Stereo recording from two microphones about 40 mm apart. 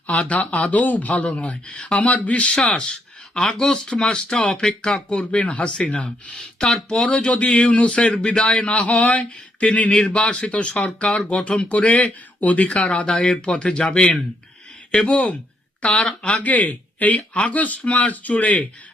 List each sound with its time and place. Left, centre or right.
0.1 s speech: left
2.7 s a sound: left
4.0 s speech: left
5.0 s speech: left
7.1 s speech: left
13.1 s speech: left
14.9 s speech: left
16.5 s speech: left